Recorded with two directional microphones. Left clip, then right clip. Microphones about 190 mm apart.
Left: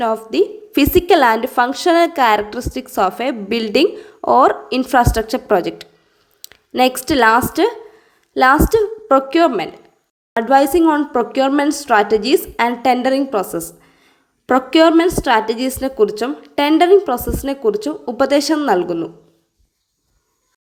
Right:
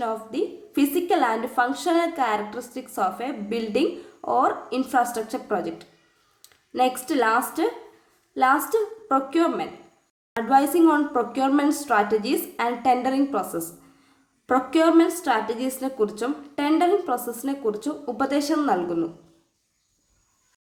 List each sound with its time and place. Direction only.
0.0 s a woman's voice: 45° left (ahead or behind)